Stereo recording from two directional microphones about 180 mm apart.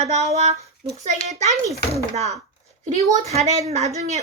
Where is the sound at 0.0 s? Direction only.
35° right (ahead or behind).